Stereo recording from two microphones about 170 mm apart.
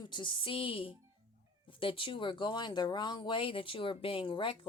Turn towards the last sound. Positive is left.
turn(degrees=30)  # may be behind; listen again after turning